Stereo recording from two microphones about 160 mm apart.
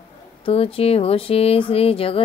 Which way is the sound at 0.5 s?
35° left (ahead or behind).